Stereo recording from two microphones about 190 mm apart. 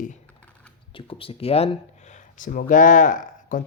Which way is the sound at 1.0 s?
30° left (ahead or behind).